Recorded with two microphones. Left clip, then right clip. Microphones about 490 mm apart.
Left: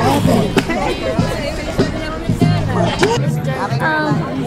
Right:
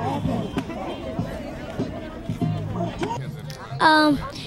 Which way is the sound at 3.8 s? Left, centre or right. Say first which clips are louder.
Right 2 dB; right.